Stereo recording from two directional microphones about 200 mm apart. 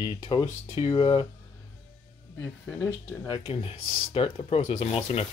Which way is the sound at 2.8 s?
20° left (ahead or behind).